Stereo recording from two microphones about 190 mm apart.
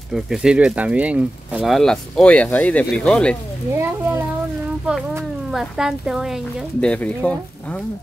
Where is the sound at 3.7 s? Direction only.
10° right (ahead or behind).